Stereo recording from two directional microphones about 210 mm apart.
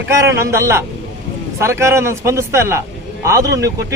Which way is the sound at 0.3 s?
15° right (ahead or behind).